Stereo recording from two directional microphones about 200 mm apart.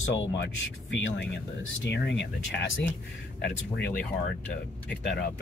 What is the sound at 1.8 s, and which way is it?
Speech, 60° left (ahead or behind).